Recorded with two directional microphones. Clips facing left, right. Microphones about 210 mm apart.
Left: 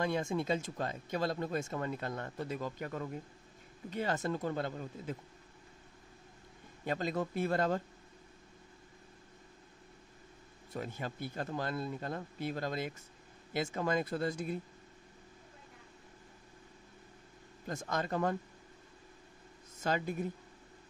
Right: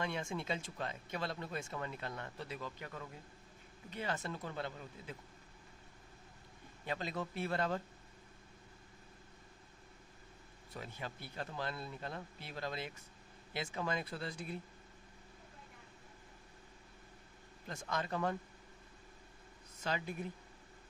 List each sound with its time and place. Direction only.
0.0 s speech: 40° left (ahead or behind)
6.9 s speech: 45° left (ahead or behind)
10.7 s speech: 45° left (ahead or behind)
17.6 s speech: 45° left (ahead or behind)
19.8 s speech: 45° left (ahead or behind)